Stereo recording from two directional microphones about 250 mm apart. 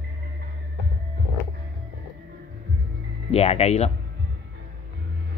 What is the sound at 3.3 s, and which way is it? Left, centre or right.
Speech, left.